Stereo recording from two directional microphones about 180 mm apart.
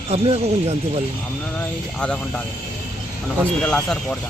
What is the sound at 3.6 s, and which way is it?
Speech, 5° left (ahead or behind).